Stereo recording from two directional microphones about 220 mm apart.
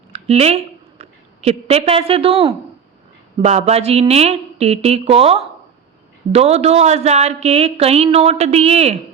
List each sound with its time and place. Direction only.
0.1 s a woman's voice: 30° right (ahead or behind)